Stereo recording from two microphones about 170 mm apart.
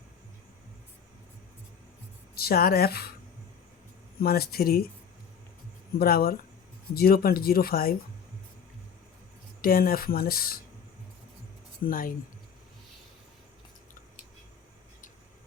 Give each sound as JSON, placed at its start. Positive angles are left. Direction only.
{"t": 2.3, "sound": "speech", "side_deg": 65}
{"t": 4.2, "sound": "speech", "side_deg": 65}
{"t": 6.0, "sound": "speech", "side_deg": 65}
{"t": 9.6, "sound": "speech", "side_deg": 60}
{"t": 11.8, "sound": "speech", "side_deg": 55}